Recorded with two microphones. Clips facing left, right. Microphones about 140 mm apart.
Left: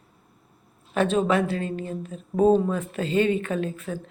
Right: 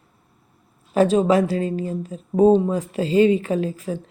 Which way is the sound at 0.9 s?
35° right (ahead or behind).